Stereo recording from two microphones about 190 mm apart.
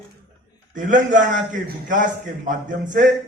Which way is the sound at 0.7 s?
40° right (ahead or behind).